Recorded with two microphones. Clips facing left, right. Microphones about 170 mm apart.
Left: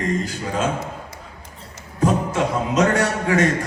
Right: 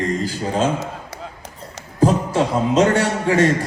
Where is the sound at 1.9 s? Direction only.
30° right (ahead or behind).